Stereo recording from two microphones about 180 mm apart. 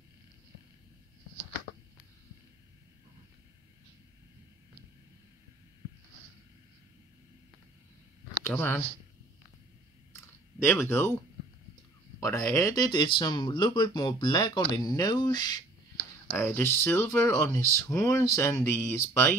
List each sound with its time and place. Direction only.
8.5 s speech: 10° left (ahead or behind)
10.6 s speech: 10° left (ahead or behind)
12.2 s speech: 20° left (ahead or behind)